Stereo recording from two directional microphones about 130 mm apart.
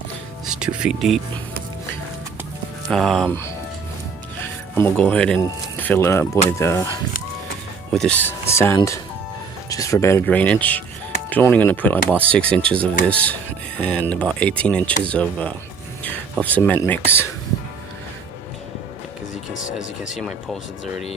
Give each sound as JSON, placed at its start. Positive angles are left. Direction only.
{"t": 0.4, "sound": "speech", "side_deg": -5}
{"t": 2.9, "sound": "speech", "side_deg": 5}
{"t": 4.9, "sound": "speech", "side_deg": 10}
{"t": 7.9, "sound": "speech", "side_deg": 10}
{"t": 20.1, "sound": "speech", "side_deg": 0}